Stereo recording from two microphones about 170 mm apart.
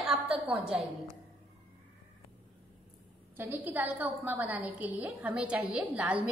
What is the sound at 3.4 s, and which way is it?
A woman's voice, 10° right (ahead or behind).